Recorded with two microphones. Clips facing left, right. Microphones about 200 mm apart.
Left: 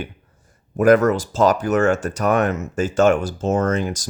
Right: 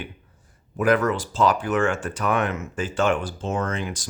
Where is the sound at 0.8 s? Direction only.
45° left (ahead or behind).